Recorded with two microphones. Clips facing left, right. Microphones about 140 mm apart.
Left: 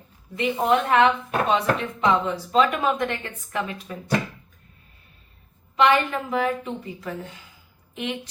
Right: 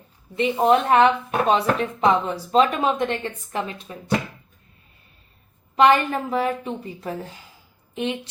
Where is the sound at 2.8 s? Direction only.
25° right (ahead or behind).